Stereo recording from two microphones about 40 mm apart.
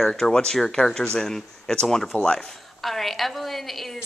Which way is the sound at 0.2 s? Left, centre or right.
Centre.